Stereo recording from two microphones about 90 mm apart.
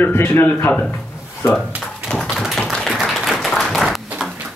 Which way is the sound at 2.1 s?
Centre (ahead or behind).